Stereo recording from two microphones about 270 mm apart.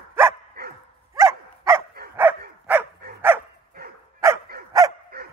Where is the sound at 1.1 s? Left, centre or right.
Centre.